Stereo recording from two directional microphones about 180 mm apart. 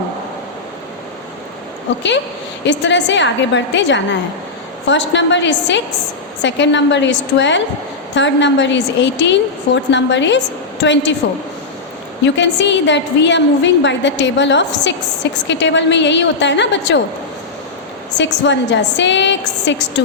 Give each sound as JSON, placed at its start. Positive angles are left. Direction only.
{"t": 2.6, "sound": "a woman's voice", "side_deg": 85}
{"t": 12.2, "sound": "a woman's voice", "side_deg": 80}
{"t": 18.4, "sound": "a woman's voice", "side_deg": 80}